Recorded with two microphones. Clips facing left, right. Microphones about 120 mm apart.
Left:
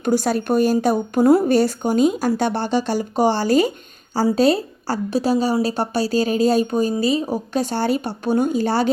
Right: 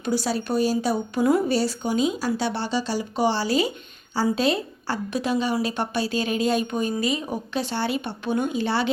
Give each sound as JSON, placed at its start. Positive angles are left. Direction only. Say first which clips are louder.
{"t": 0.0, "sound": "a woman's voice", "louder": "left 6 dB", "side_deg": 50}